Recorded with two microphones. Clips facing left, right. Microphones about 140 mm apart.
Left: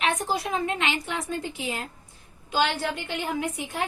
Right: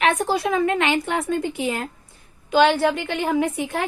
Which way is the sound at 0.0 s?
70° right (ahead or behind).